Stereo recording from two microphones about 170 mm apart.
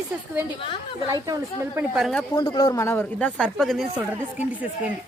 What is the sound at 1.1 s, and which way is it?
Speech, 20° right (ahead or behind).